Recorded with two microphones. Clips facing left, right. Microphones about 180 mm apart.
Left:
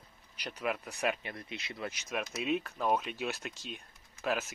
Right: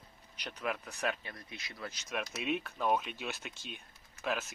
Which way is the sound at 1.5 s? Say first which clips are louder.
Left 4 dB; 25° left (ahead or behind).